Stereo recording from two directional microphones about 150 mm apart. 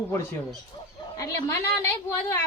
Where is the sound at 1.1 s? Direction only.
20° left (ahead or behind).